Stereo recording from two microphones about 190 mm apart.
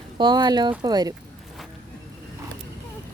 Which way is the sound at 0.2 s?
20° right (ahead or behind).